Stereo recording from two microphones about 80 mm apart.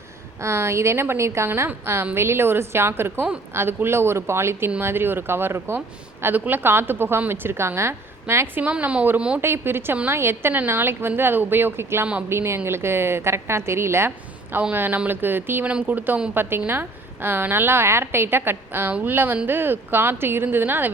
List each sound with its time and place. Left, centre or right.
0.4 s a woman's voice: right
8.6 s speech: centre
9.4 s a woman's voice: right